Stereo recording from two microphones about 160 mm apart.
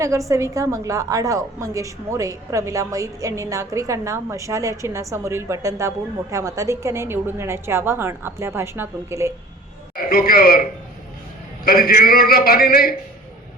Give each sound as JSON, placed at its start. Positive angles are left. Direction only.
{"t": 0.3, "sound": "a woman's voice", "side_deg": -20}
{"t": 9.9, "sound": "a man's voice", "side_deg": 65}